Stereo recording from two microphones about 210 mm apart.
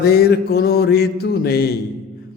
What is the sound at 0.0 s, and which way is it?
Mantra, 50° left (ahead or behind).